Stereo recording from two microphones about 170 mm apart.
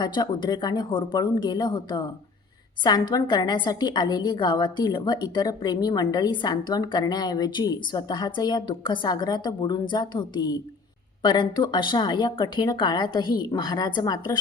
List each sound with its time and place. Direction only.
0.0 s a woman's voice: 25° left (ahead or behind)